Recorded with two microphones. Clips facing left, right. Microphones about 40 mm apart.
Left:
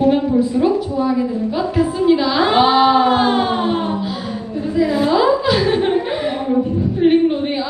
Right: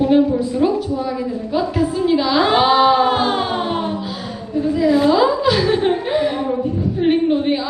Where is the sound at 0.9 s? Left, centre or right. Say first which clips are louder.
Left 4 dB; left.